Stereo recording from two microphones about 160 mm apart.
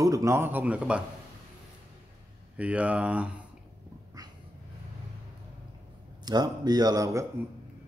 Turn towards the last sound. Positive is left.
turn(degrees=-20)  # may be behind; listen again after turning